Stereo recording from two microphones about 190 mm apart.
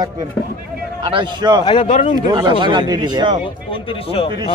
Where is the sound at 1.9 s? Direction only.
40° left (ahead or behind).